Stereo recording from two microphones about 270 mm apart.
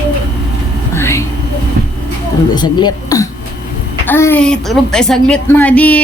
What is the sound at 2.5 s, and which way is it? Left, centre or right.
A woman's voice, centre.